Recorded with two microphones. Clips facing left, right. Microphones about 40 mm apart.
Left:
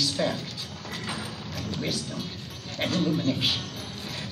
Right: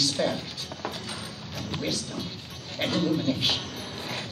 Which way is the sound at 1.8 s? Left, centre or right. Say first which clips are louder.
Right 1 dB; centre.